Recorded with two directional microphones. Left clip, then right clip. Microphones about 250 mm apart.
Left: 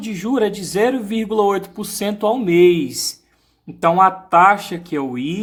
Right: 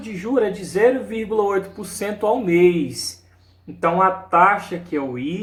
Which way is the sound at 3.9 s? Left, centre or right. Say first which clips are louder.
Left 4 dB; left.